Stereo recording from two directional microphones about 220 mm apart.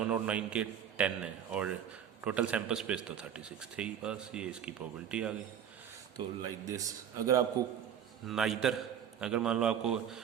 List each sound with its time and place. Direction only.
0.0 s a man's voice: 5° right (ahead or behind)
6.1 s a man's voice: 15° right (ahead or behind)
8.3 s a man's voice: centre (ahead or behind)